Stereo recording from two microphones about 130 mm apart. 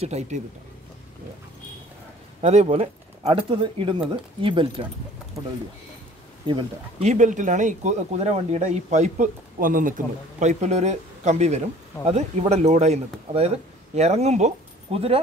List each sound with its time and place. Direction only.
0.0 s speech: 60° right (ahead or behind)
2.4 s speech: 55° right (ahead or behind); by 4.8 s 40° right (ahead or behind)
7.0 s speech: 65° right (ahead or behind); by 15.1 s 50° right (ahead or behind)